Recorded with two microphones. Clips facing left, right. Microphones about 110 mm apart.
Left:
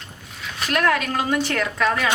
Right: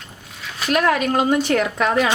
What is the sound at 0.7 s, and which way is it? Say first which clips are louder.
Speech: right 3 dB; 20° right (ahead or behind).